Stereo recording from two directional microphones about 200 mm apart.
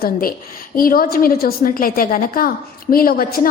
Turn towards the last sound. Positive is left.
turn(degrees=45)  # may be behind; listen again after turning